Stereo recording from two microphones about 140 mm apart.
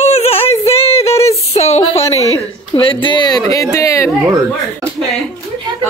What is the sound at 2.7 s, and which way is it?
Speech, 40° left (ahead or behind).